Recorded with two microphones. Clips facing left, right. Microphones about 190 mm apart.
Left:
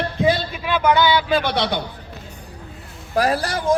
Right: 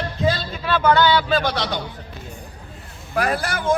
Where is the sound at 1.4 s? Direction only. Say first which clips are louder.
Left 2 dB; 60° left (ahead or behind).